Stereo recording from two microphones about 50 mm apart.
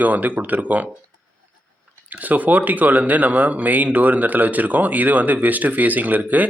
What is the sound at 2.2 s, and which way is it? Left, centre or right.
Speech, right.